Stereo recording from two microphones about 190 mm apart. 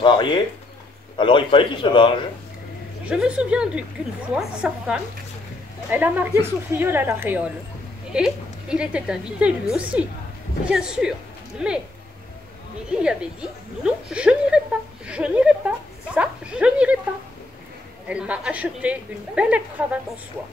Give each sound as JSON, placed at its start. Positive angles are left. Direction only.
{"t": 0.0, "sound": "a man's voice", "side_deg": 25}
{"t": 3.1, "sound": "a woman's voice", "side_deg": -5}
{"t": 13.0, "sound": "a woman's voice", "side_deg": -5}
{"t": 18.0, "sound": "a woman's voice", "side_deg": -5}